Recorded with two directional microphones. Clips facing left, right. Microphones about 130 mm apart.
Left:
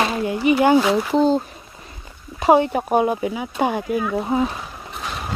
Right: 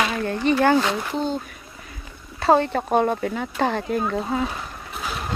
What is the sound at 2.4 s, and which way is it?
Speech, 15° left (ahead or behind).